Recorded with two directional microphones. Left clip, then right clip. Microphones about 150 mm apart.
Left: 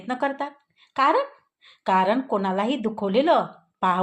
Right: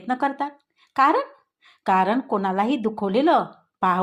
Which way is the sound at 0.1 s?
40° right (ahead or behind).